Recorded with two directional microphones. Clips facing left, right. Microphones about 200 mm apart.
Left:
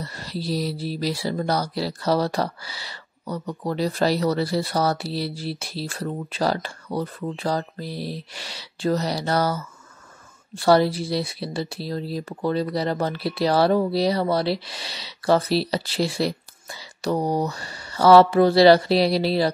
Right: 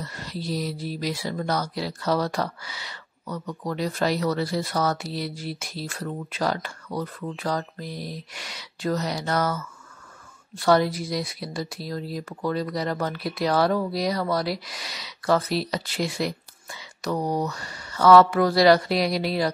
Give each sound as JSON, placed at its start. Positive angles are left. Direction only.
{"t": 0.0, "sound": "speech", "side_deg": 35}